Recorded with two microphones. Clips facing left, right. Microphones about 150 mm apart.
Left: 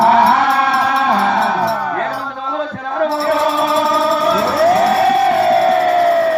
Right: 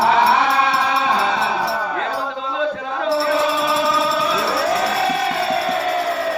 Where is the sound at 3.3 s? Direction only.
50° left (ahead or behind).